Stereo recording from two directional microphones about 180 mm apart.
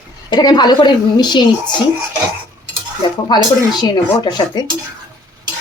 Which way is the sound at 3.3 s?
25° left (ahead or behind).